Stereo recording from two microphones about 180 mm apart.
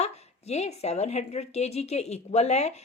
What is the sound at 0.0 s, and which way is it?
A woman's voice, 35° left (ahead or behind).